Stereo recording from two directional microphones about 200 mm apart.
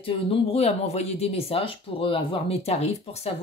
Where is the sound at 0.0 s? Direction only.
30° left (ahead or behind).